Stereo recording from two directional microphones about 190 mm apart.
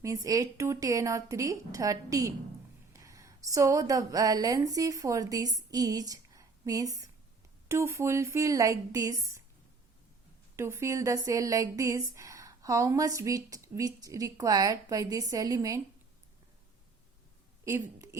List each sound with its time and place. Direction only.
0.0 s a woman's voice: 15° right (ahead or behind)
10.6 s a woman's voice: 15° right (ahead or behind)
17.7 s a woman's voice: 15° right (ahead or behind)